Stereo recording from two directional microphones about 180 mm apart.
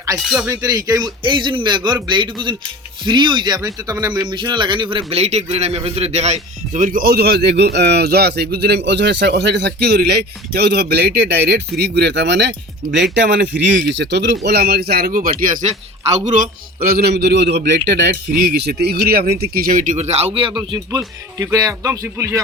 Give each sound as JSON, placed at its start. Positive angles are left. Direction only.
{"t": 0.2, "sound": "speech", "side_deg": 0}
{"t": 0.4, "sound": "a man's voice", "side_deg": -20}
{"t": 20.7, "sound": "a man's voice", "side_deg": -20}